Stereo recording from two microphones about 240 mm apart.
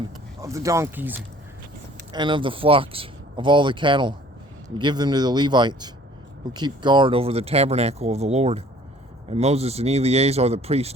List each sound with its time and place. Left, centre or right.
0.4 s speech: centre
2.1 s speech: centre